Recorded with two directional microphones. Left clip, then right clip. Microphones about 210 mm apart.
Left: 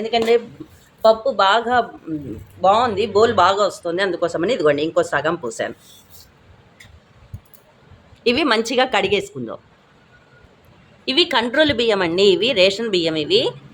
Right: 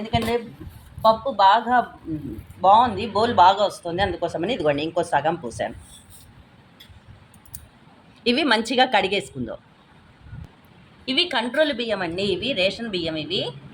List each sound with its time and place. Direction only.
0.0 s speech: 25° left (ahead or behind)
8.2 s a woman's voice: 15° left (ahead or behind)
11.0 s a woman's voice: 30° left (ahead or behind); by 13.5 s 45° left (ahead or behind)